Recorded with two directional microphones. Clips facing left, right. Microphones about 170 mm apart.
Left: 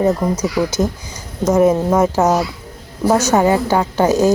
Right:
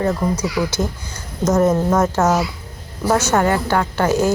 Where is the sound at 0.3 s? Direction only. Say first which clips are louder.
Left 3 dB; 40° left (ahead or behind).